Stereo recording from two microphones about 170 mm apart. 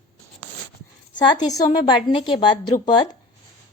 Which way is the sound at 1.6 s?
30° left (ahead or behind).